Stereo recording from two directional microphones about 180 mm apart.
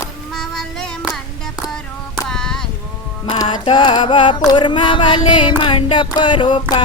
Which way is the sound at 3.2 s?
25° left (ahead or behind).